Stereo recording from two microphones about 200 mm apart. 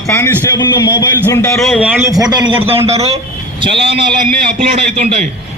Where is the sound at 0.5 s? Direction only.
20° left (ahead or behind).